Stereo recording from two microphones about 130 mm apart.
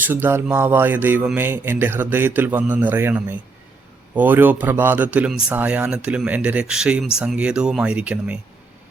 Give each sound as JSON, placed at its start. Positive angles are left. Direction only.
{"t": 0.0, "sound": "a man's voice", "side_deg": -15}